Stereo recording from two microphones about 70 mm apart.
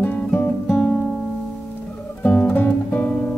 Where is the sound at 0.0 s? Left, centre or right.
Left.